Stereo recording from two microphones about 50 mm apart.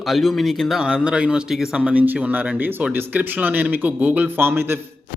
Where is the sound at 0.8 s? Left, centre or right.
Centre.